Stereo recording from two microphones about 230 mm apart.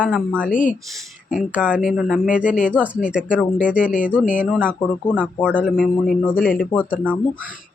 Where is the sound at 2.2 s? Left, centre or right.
Left.